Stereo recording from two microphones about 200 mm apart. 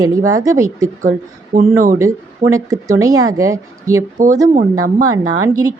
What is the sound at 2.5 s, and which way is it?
A woman's voice, 15° right (ahead or behind).